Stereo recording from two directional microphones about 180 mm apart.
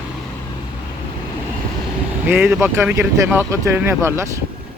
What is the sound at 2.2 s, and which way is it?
Speech, 10° right (ahead or behind).